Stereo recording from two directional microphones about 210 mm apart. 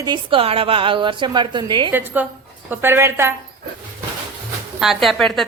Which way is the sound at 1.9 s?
10° right (ahead or behind).